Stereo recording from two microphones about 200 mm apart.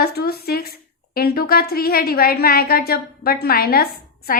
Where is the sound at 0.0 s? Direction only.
50° left (ahead or behind).